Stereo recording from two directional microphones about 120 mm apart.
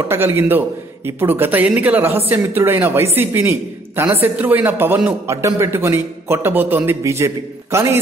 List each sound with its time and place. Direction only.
0.1 s a man's voice: 20° right (ahead or behind)